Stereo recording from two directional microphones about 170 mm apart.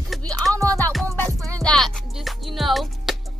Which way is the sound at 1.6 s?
5° left (ahead or behind).